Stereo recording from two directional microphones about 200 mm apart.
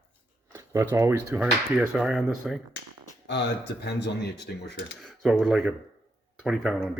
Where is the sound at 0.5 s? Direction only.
10° right (ahead or behind).